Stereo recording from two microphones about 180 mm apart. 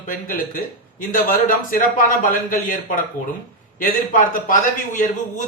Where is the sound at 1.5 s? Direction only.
50° left (ahead or behind).